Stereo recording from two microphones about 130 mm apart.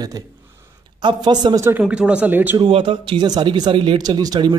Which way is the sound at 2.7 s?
40° right (ahead or behind).